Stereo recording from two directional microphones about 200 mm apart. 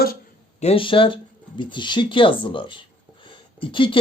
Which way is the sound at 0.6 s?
25° left (ahead or behind).